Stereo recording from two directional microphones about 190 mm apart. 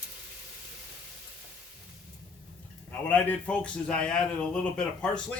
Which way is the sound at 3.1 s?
10° left (ahead or behind).